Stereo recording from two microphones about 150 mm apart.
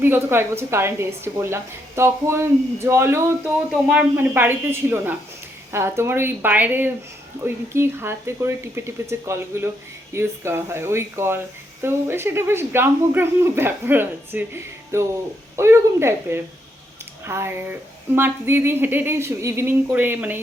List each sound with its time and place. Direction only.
0.0 s a woman's voice: 15° right (ahead or behind)
3.7 s a woman's voice: 5° right (ahead or behind)